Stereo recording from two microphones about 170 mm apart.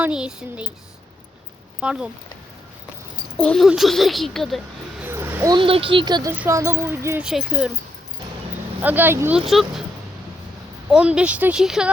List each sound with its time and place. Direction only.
0.0 s speech: 5° right (ahead or behind)
1.8 s speech: 5° right (ahead or behind)
3.3 s speech: 5° left (ahead or behind)
5.0 s a sound: 10° right (ahead or behind)
5.5 s speech: 30° right (ahead or behind)
6.4 s a sound: 15° right (ahead or behind)
7.2 s speech: 5° right (ahead or behind)
8.8 s a sound: 10° right (ahead or behind)
9.5 s speech: centre (ahead or behind)
10.9 s speech: 5° right (ahead or behind)